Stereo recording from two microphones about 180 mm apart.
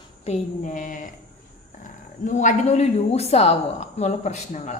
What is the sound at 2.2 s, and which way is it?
A woman's voice, 45° left (ahead or behind).